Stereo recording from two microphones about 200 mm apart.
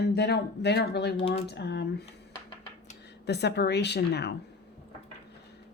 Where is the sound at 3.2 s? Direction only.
55° left (ahead or behind).